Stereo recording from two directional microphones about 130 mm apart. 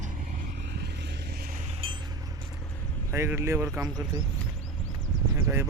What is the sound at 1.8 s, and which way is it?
Vehicle, 45° right (ahead or behind).